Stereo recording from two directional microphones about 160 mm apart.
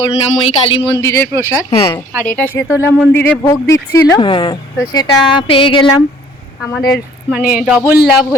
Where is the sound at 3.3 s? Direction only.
20° left (ahead or behind).